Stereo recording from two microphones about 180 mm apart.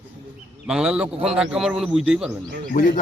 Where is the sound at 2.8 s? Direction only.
50° left (ahead or behind).